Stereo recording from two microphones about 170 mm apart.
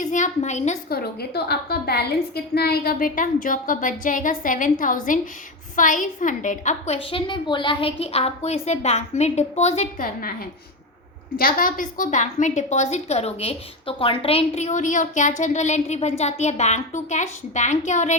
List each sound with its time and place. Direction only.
0.0 s a woman's voice: 45° left (ahead or behind)
0.9 s a woman's voice: 65° left (ahead or behind); by 10.1 s 40° left (ahead or behind)
11.3 s a woman's voice: 55° left (ahead or behind)